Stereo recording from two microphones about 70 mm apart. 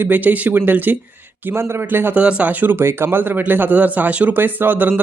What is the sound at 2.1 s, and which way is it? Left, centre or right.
A man's voice, centre.